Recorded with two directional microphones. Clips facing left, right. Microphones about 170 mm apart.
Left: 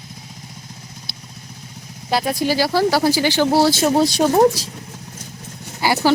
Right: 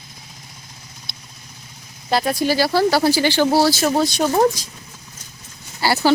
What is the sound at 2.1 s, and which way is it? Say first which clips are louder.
Speech: even; 10° left (ahead or behind).